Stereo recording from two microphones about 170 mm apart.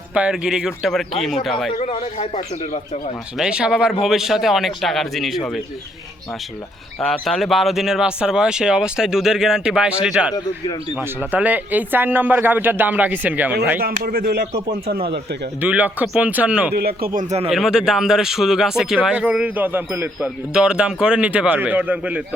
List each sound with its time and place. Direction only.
0.1 s speech: 5° right (ahead or behind)
1.8 s speech: 35° left (ahead or behind)
3.3 s speech: 5° right (ahead or behind)
7.0 s speech: centre (ahead or behind)
14.0 s speech: 60° right (ahead or behind)
15.6 s speech: 10° right (ahead or behind)
16.7 s speech: 60° right (ahead or behind); by 17.5 s 40° right (ahead or behind)
17.5 s speech: 5° right (ahead or behind)